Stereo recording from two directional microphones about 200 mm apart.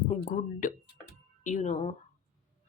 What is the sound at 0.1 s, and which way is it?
A woman's voice, 40° left (ahead or behind).